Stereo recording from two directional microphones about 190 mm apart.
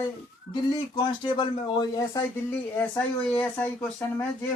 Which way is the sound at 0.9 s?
25° left (ahead or behind).